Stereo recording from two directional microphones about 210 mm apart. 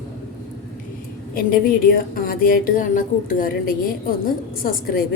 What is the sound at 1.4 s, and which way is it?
Speech, 45° left (ahead or behind).